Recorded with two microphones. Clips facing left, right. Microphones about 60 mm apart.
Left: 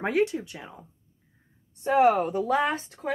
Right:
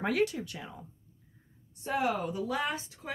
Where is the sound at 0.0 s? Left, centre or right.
Left.